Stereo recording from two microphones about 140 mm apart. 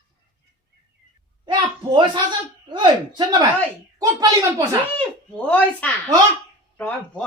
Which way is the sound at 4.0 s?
25° right (ahead or behind).